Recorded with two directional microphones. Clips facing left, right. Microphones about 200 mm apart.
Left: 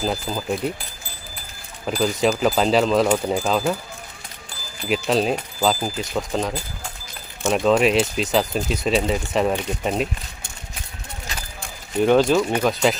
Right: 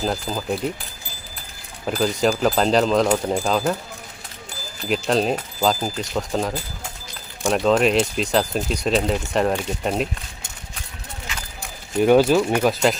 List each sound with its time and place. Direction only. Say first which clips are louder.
0.0 s speech: even; 5° left (ahead or behind)
1.9 s speech: even; centre (ahead or behind)
4.9 s speech: even; centre (ahead or behind)
11.3 s a sound: left 1 dB; 40° left (ahead or behind)
12.0 s speech: right 1 dB; 5° right (ahead or behind)